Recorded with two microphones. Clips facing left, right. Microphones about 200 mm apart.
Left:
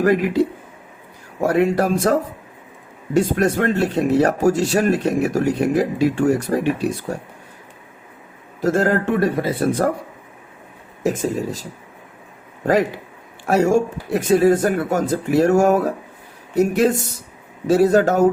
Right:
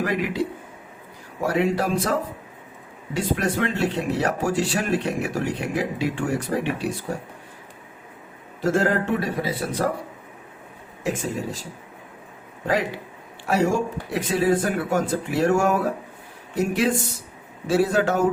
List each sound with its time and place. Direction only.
0.0 s speech: 45° left (ahead or behind)
3.2 s speech: 45° left (ahead or behind)
8.6 s speech: 40° left (ahead or behind)
11.0 s speech: 40° left (ahead or behind)
13.5 s speech: 45° left (ahead or behind)